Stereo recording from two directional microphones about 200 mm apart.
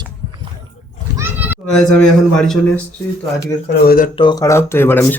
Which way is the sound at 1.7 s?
5° left (ahead or behind).